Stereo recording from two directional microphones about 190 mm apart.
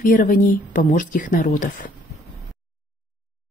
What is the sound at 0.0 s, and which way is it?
Speech, 45° left (ahead or behind).